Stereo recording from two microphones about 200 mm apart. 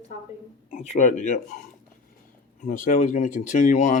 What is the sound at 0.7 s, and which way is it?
Speech, 35° left (ahead or behind).